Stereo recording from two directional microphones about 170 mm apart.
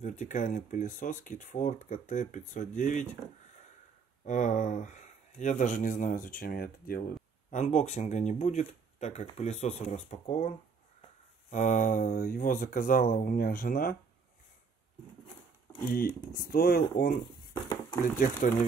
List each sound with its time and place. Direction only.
0.0 s speech: 45° left (ahead or behind)
4.2 s speech: 45° left (ahead or behind)
7.5 s speech: 45° left (ahead or behind)
11.5 s speech: 50° left (ahead or behind)
15.9 s speech: 60° left (ahead or behind)
18.1 s speech: 50° left (ahead or behind)